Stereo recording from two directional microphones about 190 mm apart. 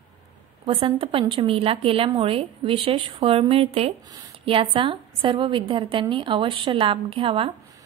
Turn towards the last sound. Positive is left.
turn(degrees=-30)  # may be behind; listen again after turning